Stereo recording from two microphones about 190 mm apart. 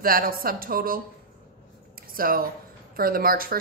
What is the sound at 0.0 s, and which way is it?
A woman's voice, 50° right (ahead or behind).